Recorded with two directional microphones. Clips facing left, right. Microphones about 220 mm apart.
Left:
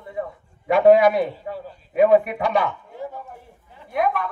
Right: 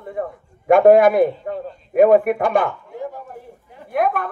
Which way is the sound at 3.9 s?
50° right (ahead or behind).